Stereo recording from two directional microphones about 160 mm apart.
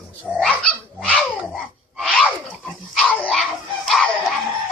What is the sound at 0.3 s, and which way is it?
Dog, 5° left (ahead or behind).